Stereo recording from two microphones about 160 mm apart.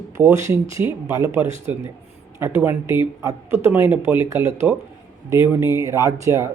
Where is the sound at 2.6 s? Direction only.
15° right (ahead or behind).